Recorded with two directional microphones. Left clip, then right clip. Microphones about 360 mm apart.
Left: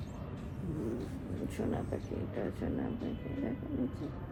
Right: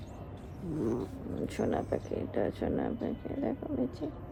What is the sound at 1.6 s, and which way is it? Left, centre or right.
Speech, right.